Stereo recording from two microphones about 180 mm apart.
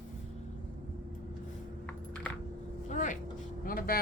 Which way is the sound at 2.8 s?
45° left (ahead or behind).